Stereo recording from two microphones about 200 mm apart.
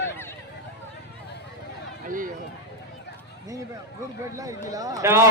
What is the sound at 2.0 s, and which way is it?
Speech, 40° right (ahead or behind).